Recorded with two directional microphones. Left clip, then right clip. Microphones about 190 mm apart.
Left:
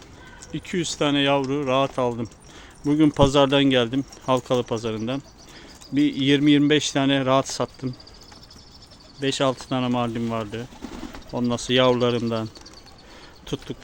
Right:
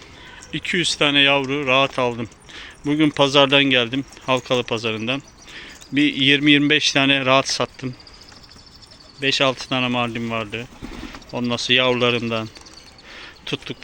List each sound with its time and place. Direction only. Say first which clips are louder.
0.5 s speech: right 7 dB; 5° left (ahead or behind)
9.2 s speech: right 4 dB; 20° left (ahead or behind)
13.1 s a sound: right 5 dB; 10° left (ahead or behind)